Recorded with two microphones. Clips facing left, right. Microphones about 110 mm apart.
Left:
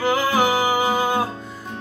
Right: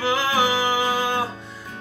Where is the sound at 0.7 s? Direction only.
10° left (ahead or behind).